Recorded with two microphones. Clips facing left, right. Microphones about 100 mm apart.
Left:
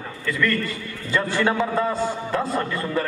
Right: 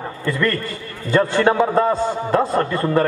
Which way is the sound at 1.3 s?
25° right (ahead or behind).